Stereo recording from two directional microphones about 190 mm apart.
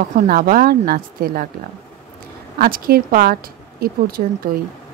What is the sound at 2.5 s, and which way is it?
A woman's voice, 50° right (ahead or behind).